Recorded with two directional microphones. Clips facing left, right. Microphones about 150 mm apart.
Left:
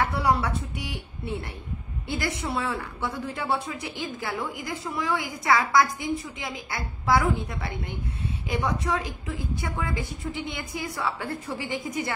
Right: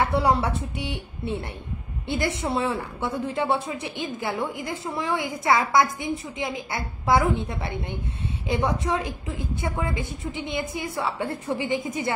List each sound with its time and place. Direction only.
0.0 s a woman's voice: 25° right (ahead or behind)